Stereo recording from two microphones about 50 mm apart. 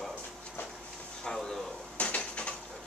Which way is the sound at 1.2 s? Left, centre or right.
Centre.